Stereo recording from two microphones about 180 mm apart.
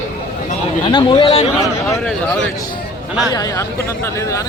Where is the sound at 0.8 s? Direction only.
25° left (ahead or behind).